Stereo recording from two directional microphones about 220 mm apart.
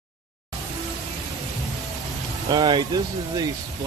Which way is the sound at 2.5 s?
20° right (ahead or behind).